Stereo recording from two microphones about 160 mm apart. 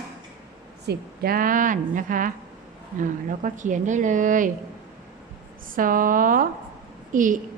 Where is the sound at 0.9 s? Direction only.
65° right (ahead or behind).